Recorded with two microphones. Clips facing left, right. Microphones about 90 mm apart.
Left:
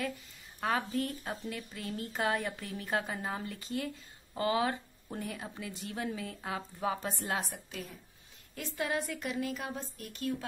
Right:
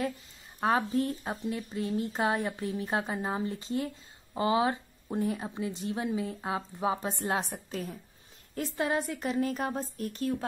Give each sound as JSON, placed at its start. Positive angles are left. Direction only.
{"t": 0.6, "sound": "a woman's voice", "side_deg": -25}